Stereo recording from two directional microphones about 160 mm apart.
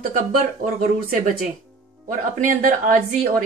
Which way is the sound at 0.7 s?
60° right (ahead or behind).